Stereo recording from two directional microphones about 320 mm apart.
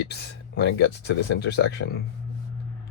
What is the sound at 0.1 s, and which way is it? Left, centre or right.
Speech, left.